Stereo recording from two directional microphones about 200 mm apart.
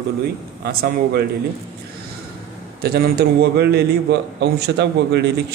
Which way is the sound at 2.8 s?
50° right (ahead or behind).